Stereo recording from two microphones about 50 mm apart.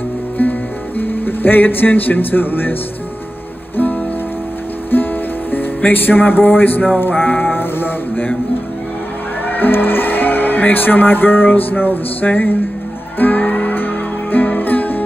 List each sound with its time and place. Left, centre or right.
0.4 s music: left
3.7 s music: left
5.5 s speech: left
7.0 s music: left
9.5 s speech: left
13.2 s music: left